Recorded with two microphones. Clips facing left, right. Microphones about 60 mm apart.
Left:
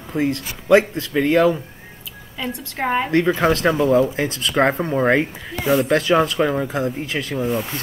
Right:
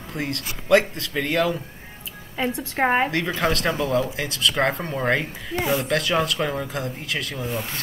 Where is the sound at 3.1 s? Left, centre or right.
Centre.